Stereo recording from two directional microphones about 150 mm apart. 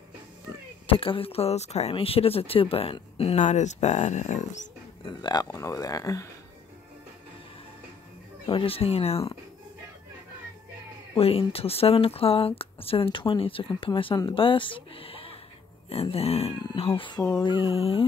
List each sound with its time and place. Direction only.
0.8 s speech: 35° left (ahead or behind); by 4.6 s 55° left (ahead or behind)
5.0 s speech: 30° left (ahead or behind)
8.5 s speech: 35° left (ahead or behind)
11.1 s speech: 40° left (ahead or behind)